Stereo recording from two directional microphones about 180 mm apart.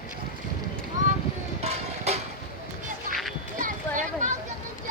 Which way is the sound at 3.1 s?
Centre (ahead or behind).